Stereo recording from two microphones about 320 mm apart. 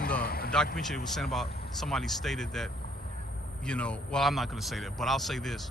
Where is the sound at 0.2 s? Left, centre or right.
Left.